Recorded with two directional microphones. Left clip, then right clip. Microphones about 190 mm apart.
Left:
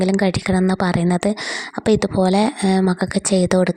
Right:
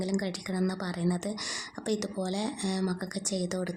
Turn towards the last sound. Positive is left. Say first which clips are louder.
# left 16 dB
turn(degrees=45)  # may be behind; listen again after turning